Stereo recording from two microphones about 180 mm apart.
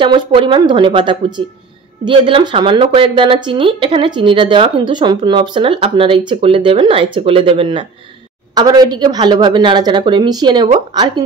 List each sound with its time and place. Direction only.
0.0 s a woman's voice: 30° right (ahead or behind)